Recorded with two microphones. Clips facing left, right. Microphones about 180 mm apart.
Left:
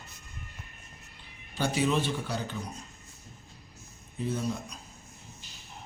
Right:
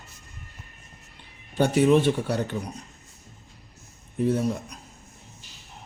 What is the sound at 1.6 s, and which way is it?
Speech, 60° right (ahead or behind).